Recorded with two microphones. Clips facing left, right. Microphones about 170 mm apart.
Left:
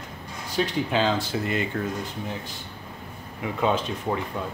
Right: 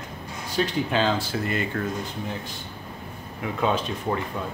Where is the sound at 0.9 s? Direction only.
15° left (ahead or behind).